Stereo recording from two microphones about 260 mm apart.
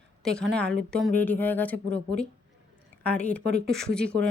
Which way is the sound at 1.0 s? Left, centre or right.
Centre.